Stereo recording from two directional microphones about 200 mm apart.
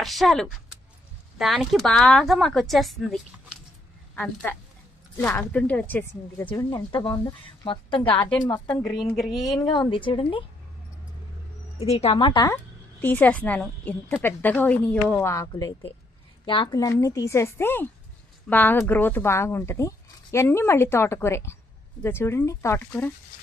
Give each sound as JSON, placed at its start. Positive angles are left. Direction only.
{"t": 0.0, "sound": "a woman's voice", "side_deg": 0}
{"t": 9.1, "sound": "a woman's voice", "side_deg": 0}
{"t": 9.6, "sound": "speech", "side_deg": 20}
{"t": 11.8, "sound": "speech", "side_deg": 30}
{"t": 13.0, "sound": "speech", "side_deg": 10}